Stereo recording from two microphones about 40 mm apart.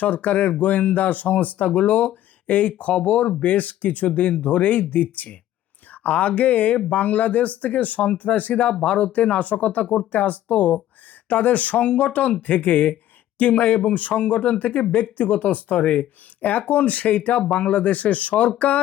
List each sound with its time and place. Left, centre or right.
0.0 s speech: left